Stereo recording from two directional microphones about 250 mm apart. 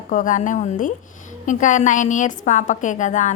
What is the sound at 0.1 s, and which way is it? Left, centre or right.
A woman's voice, left.